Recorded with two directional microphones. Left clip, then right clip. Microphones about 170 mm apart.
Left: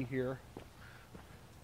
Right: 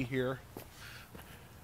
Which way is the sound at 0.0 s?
25° right (ahead or behind).